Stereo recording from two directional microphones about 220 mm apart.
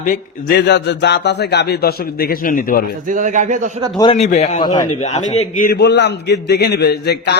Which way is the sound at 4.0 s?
30° left (ahead or behind).